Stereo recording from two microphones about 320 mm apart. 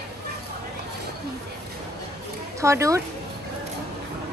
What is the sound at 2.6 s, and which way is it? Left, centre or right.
Speech, centre.